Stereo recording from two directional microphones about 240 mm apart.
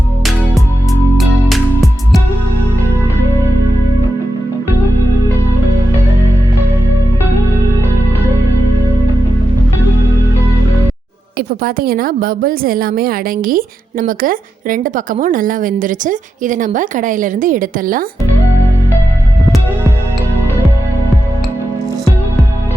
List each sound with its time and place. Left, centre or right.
1.1 s music: centre
11.3 s a woman's voice: right